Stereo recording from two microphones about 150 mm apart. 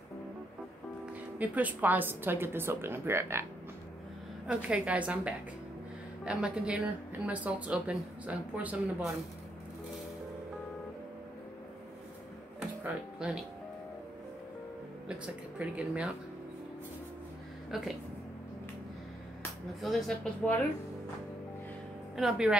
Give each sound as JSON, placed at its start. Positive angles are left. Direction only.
{"t": 1.4, "sound": "a woman's voice", "side_deg": -10}
{"t": 4.5, "sound": "a woman's voice", "side_deg": -5}
{"t": 13.2, "sound": "speech", "side_deg": -5}
{"t": 15.0, "sound": "a woman's voice", "side_deg": -10}
{"t": 17.6, "sound": "speech", "side_deg": -5}
{"t": 19.8, "sound": "speech", "side_deg": 0}
{"t": 22.1, "sound": "speech", "side_deg": -5}